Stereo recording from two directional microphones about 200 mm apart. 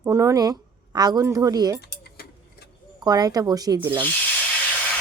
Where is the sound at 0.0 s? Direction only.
15° right (ahead or behind).